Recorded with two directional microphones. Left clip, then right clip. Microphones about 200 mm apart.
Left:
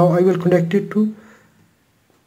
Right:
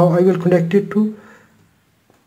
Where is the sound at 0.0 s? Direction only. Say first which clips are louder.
Right 1 dB; centre (ahead or behind).